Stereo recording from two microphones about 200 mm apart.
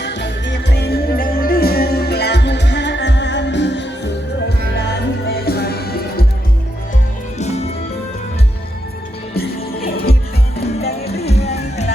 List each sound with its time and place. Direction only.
0.0 s music: 60° left (ahead or behind)
5.5 s music: 50° left (ahead or behind)
7.3 s music: 35° left (ahead or behind)
9.3 s music: 50° left (ahead or behind)
11.2 s music: 30° left (ahead or behind)